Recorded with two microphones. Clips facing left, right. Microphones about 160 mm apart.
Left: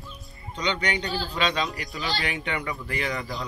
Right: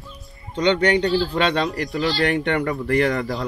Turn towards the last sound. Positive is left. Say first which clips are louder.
# right 10 dB
turn(degrees=-60)  # may be behind; listen again after turning